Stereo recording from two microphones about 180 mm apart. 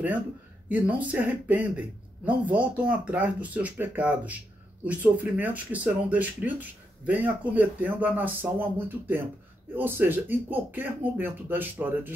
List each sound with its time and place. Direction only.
0.7 s speech: 10° right (ahead or behind)